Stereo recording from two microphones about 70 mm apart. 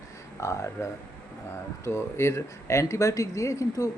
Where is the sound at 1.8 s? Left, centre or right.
Left.